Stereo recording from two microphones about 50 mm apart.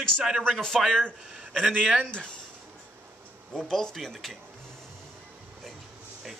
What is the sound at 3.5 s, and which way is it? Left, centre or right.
Speech, centre.